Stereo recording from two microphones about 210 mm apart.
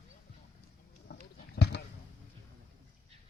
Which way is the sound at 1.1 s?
55° left (ahead or behind).